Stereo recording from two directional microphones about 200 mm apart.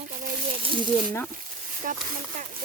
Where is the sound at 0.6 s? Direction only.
25° right (ahead or behind).